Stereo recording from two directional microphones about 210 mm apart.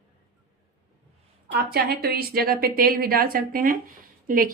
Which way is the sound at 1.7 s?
45° right (ahead or behind).